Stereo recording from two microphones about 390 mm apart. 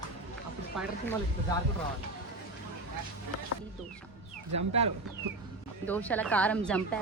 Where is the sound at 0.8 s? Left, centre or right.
Centre.